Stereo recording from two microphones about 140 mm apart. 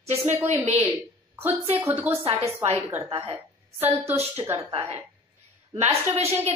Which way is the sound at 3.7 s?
15° right (ahead or behind).